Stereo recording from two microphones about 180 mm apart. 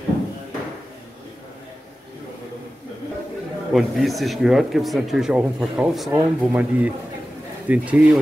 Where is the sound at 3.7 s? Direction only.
Centre (ahead or behind).